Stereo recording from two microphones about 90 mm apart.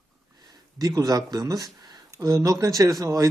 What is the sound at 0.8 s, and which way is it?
Speech, 40° right (ahead or behind).